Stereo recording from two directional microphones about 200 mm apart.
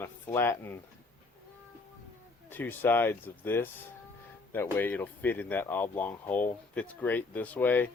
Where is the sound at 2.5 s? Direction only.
10° left (ahead or behind).